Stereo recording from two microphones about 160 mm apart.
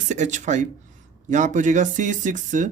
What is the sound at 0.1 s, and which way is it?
Speech, 50° right (ahead or behind).